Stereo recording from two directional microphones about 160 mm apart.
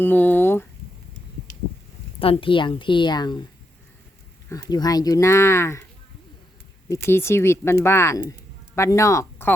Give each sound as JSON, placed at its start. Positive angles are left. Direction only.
{"t": 0.0, "sound": "speech", "side_deg": 10}
{"t": 2.4, "sound": "speech", "side_deg": 30}
{"t": 4.4, "sound": "speech", "side_deg": 20}
{"t": 6.8, "sound": "speech", "side_deg": 20}